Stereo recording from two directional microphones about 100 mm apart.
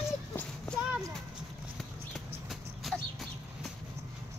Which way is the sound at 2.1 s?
Centre (ahead or behind).